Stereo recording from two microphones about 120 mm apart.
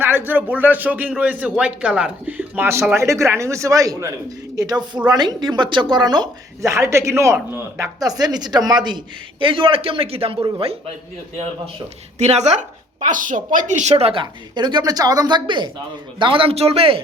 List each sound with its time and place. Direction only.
0.0 s speech: 15° right (ahead or behind); by 6.2 s 40° right (ahead or behind)
6.6 s speech: 25° right (ahead or behind)
8.2 s speech: 35° right (ahead or behind); by 10.3 s 55° right (ahead or behind)
12.2 s a woman's voice: 65° right (ahead or behind)
13.1 s speech: 90° right
13.9 s speech: 50° right (ahead or behind)